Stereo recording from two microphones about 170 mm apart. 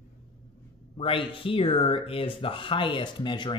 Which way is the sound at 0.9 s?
30° left (ahead or behind).